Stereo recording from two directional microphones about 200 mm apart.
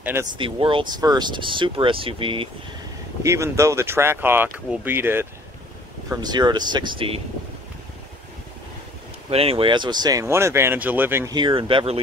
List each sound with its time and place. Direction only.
0.0 s speech: 10° right (ahead or behind)
0.4 s speech: 25° right (ahead or behind)
3.2 s speech: 15° right (ahead or behind)
6.0 s speech: 20° right (ahead or behind)
9.3 s speech: 30° right (ahead or behind)